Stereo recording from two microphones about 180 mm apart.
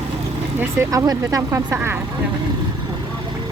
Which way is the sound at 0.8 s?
20° right (ahead or behind).